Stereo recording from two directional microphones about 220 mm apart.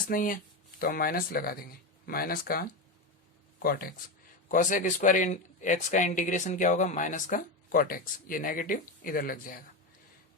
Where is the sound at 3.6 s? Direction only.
40° left (ahead or behind).